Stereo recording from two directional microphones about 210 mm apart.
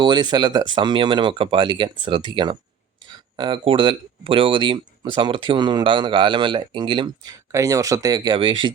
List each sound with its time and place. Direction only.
0.0 s speech: 20° right (ahead or behind)